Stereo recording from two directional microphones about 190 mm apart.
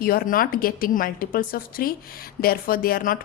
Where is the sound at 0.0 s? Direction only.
50° left (ahead or behind).